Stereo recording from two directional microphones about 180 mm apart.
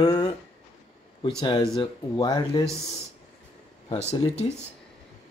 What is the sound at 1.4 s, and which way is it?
Speech, 25° left (ahead or behind).